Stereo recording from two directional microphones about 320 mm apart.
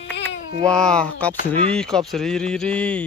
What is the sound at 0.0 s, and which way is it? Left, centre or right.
Babbling, left.